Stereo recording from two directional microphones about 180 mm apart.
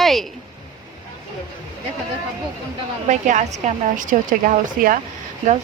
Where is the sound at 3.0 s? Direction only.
45° right (ahead or behind).